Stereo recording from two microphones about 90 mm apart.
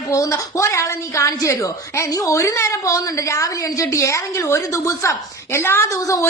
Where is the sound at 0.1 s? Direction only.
40° left (ahead or behind).